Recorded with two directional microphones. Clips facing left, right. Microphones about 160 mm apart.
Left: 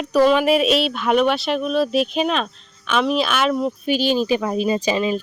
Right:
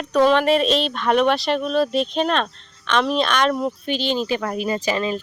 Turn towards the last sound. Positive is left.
turn(degrees=15)  # may be behind; listen again after turning